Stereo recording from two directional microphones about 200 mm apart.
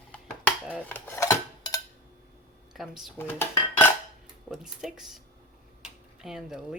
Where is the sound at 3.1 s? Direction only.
10° left (ahead or behind).